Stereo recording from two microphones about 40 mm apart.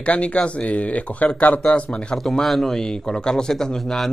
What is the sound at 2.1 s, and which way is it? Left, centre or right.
Speech, centre.